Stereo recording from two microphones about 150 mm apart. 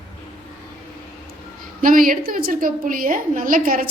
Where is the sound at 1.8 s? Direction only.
65° right (ahead or behind).